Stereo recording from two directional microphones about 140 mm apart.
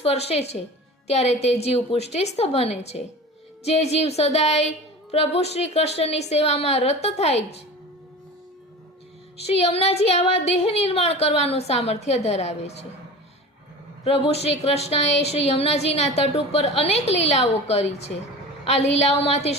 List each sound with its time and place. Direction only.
0.0 s a woman's voice: 50° left (ahead or behind)
9.5 s a woman's voice: 45° left (ahead or behind)
14.0 s a woman's voice: 50° left (ahead or behind)